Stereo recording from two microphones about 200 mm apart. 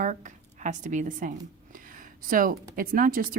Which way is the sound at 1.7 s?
40° right (ahead or behind).